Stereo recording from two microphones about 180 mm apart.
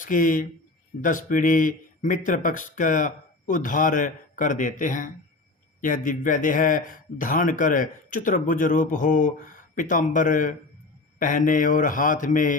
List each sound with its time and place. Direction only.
0.0 s speech: 50° left (ahead or behind)